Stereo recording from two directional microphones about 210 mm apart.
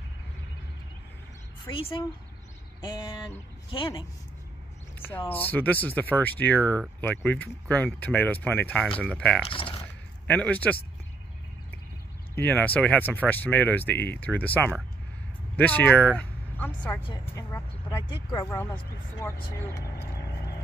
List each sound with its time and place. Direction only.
1.7 s speech: 25° left (ahead or behind)
5.3 s speech: 10° left (ahead or behind)
9.5 s a sound: 25° left (ahead or behind)
10.2 s speech: 5° left (ahead or behind)
12.4 s speech: 5° left (ahead or behind)